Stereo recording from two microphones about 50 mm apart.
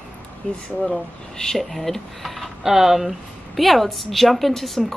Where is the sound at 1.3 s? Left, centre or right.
Centre.